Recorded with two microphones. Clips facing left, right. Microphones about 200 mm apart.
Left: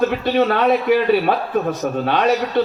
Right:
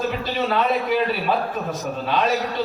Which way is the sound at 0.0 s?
60° left (ahead or behind).